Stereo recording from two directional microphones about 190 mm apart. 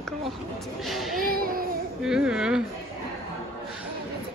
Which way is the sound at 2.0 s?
5° right (ahead or behind).